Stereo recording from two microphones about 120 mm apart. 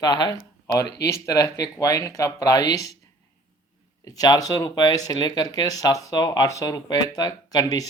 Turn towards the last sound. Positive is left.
turn(degrees=30)  # may be behind; listen again after turning